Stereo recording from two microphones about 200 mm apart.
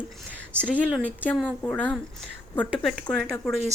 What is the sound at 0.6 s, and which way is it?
A woman's voice, 5° left (ahead or behind).